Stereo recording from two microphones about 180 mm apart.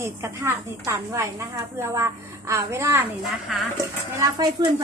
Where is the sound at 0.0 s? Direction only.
15° right (ahead or behind).